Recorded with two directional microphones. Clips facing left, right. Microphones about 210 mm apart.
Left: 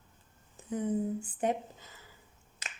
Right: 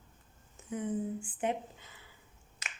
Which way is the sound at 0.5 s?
35° left (ahead or behind).